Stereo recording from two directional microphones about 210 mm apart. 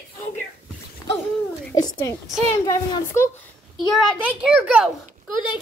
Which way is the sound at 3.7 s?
Centre (ahead or behind).